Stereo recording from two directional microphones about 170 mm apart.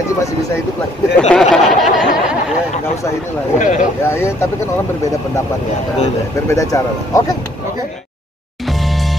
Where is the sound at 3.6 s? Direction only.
45° left (ahead or behind).